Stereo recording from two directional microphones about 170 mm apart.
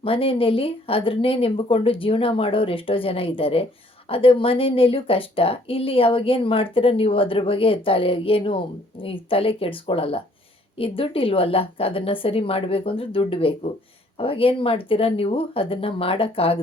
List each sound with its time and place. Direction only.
0.0 s speech: 35° left (ahead or behind)